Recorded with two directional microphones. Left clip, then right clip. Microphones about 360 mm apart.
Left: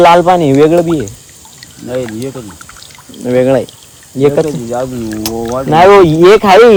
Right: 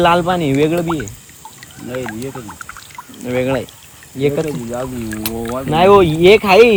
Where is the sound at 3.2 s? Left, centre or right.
Left.